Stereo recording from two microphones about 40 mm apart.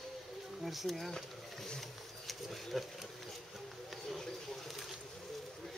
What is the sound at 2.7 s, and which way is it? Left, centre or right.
Speech, centre.